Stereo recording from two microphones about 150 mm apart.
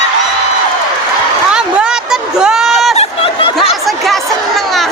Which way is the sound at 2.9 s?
40° left (ahead or behind).